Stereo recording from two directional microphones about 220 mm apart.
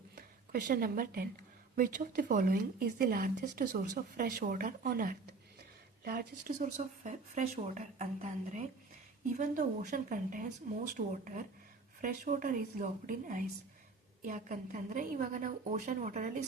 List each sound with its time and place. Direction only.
0.2 s a woman's voice: 40° right (ahead or behind)